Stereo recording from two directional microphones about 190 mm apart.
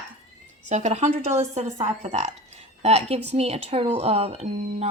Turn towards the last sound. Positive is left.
turn(degrees=-35)  # may be behind; listen again after turning